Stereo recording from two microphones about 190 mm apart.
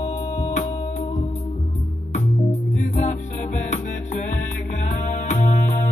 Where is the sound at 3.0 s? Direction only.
40° left (ahead or behind).